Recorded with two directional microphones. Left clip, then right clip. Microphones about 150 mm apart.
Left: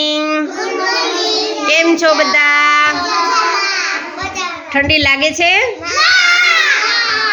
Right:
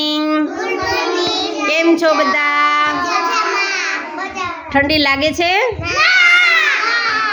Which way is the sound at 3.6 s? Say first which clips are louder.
Left 2 dB; 40° right (ahead or behind).